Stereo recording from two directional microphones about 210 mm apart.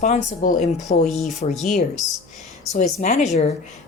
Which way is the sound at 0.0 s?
40° left (ahead or behind).